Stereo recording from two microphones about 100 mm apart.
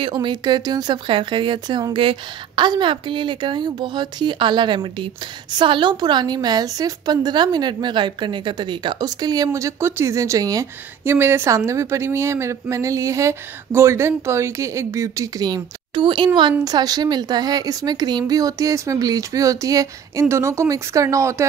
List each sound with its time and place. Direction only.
0.0 s a woman's voice: 50° right (ahead or behind); by 21.5 s 30° right (ahead or behind)